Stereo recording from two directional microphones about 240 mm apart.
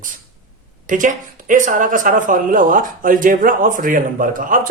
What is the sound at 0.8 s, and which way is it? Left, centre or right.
Speech, right.